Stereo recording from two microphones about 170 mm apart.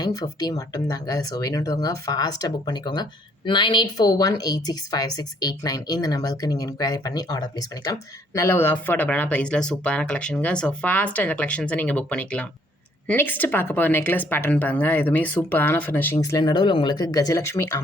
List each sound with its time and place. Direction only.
0.0 s speech: 20° left (ahead or behind)
16.4 s speech: 25° left (ahead or behind)